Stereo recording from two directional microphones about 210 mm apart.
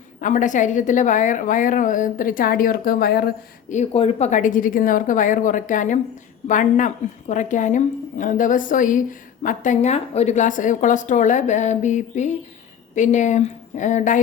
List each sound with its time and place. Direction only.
0.2 s a woman's voice: 35° left (ahead or behind)